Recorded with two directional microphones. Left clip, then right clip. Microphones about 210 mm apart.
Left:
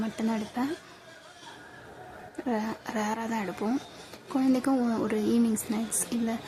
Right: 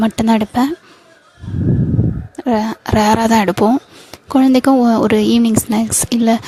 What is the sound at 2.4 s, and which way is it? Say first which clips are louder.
A woman's voice: right 14 dB; 40° right (ahead or behind).